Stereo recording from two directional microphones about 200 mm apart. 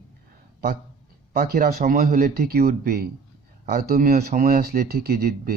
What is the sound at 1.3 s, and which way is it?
Speech, 50° right (ahead or behind).